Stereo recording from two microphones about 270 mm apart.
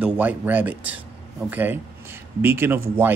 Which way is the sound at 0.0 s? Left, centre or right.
Centre.